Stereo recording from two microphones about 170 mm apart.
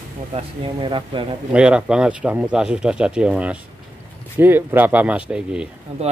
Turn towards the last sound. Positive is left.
turn(degrees=-35)  # may be behind; listen again after turning